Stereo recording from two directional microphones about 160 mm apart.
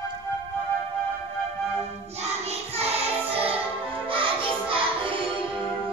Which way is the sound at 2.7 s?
40° right (ahead or behind).